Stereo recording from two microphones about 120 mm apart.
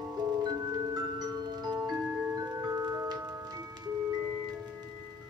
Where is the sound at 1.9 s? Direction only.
20° right (ahead or behind).